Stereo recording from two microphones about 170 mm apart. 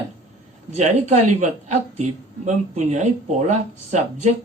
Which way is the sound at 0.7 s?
40° right (ahead or behind).